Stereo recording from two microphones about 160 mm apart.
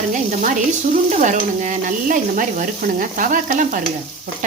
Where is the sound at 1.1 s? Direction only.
50° right (ahead or behind).